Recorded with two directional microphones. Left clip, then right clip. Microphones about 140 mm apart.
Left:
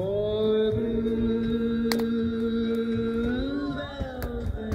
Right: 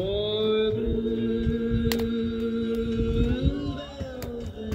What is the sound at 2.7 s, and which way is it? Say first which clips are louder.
Music: even; 25° right (ahead or behind).